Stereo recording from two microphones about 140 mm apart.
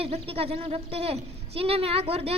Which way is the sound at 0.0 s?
45° right (ahead or behind).